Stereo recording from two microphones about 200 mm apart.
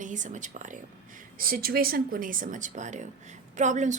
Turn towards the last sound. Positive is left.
turn(degrees=-35)  # may be behind; listen again after turning